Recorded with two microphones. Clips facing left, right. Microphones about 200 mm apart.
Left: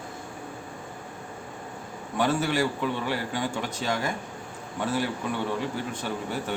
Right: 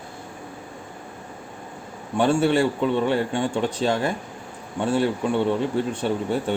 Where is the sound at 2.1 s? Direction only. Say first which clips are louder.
Right 6 dB; 30° right (ahead or behind).